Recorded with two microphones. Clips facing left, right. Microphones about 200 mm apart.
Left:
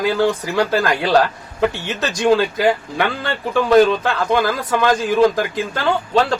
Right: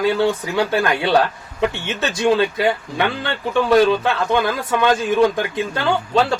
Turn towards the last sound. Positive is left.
turn(degrees=0)  # may be behind; listen again after turning